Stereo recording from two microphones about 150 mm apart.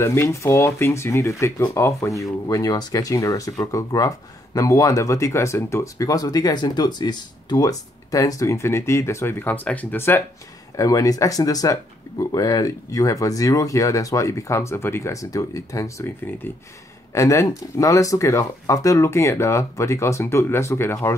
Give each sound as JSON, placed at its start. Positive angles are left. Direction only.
{"t": 0.0, "sound": "speech", "side_deg": 20}
{"t": 17.1, "sound": "speech", "side_deg": 20}